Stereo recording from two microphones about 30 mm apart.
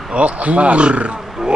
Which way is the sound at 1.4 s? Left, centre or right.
Centre.